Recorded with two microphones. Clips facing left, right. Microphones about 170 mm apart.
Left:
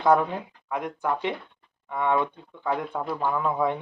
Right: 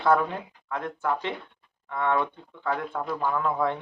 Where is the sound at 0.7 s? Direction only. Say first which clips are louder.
Left 1 dB; 15° left (ahead or behind).